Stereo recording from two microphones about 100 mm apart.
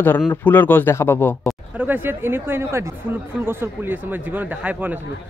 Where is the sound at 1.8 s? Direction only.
20° right (ahead or behind).